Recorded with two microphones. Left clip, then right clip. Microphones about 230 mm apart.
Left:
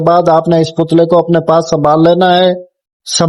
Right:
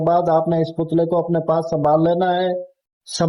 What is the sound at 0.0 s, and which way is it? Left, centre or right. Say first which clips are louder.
Speech: left 8 dB; centre.